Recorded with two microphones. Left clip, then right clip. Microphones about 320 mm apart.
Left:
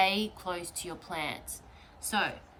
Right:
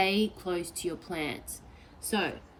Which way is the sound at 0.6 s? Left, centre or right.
Centre.